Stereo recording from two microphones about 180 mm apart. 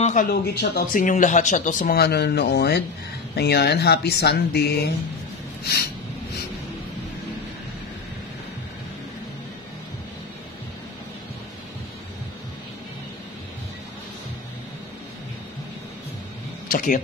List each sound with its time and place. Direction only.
0.0 s speech: 45° left (ahead or behind)
2.0 s speech: 65° left (ahead or behind)
16.6 s speech: 50° left (ahead or behind)